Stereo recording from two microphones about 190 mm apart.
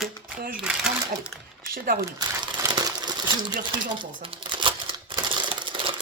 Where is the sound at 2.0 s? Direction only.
20° right (ahead or behind).